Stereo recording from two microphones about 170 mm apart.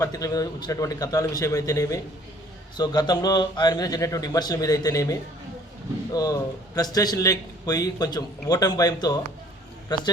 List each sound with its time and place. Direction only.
0.0 s a man's voice: 20° left (ahead or behind)
6.1 s a man's voice: 20° left (ahead or behind)